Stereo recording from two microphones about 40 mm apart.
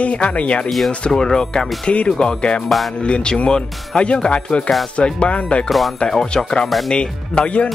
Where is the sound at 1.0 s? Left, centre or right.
Centre.